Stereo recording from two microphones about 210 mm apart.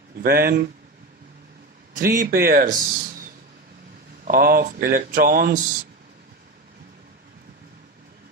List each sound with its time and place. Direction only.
0.2 s speech: 45° right (ahead or behind)
2.0 s a man's voice: 40° right (ahead or behind)
4.3 s speech: 45° right (ahead or behind)